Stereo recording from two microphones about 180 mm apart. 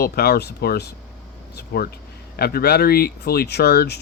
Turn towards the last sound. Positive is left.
turn(degrees=65)  # may be behind; listen again after turning